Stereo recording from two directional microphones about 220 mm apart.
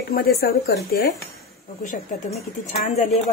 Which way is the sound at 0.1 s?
45° left (ahead or behind).